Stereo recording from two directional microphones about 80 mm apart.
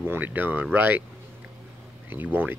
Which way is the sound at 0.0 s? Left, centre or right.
Right.